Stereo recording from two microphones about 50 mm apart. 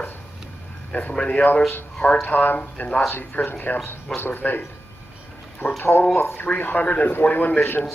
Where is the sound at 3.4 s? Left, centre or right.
Left.